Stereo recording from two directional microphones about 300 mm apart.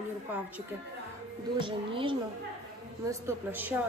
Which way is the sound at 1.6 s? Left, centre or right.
Centre.